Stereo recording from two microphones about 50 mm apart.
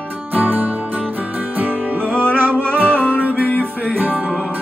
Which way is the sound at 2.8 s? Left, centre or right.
Right.